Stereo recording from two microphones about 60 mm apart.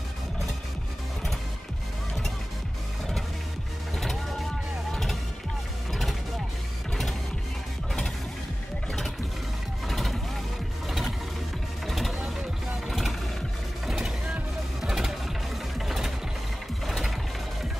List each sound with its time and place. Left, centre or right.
3.9 s music: centre
9.8 s vehicle: centre
10.9 s a sound: centre
11.8 s vehicle: centre
14.8 s music: centre
15.8 s sewing machine: centre
16.8 s ratchet: centre